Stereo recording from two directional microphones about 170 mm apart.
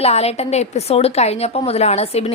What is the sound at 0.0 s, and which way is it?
A woman's voice, 40° left (ahead or behind).